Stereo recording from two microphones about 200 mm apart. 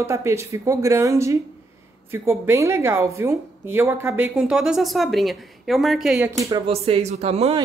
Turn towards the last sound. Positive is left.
turn(degrees=-30)  # may be behind; listen again after turning